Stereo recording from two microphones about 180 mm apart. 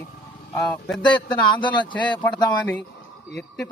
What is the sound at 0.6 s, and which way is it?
Speech, centre (ahead or behind).